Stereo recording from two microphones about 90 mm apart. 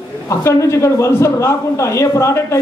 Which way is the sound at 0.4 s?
35° left (ahead or behind).